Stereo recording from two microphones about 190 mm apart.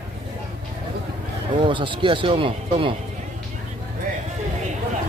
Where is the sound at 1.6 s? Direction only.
25° right (ahead or behind).